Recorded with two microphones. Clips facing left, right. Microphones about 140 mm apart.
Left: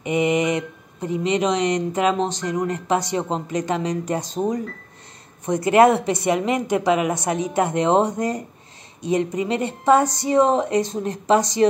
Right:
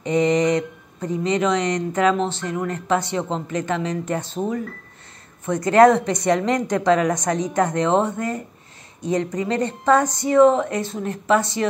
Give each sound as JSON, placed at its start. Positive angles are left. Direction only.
{"t": 0.0, "sound": "speech", "side_deg": 10}